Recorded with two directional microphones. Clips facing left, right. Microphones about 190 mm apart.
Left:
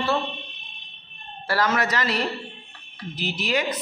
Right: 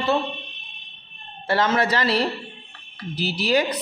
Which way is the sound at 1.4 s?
25° right (ahead or behind).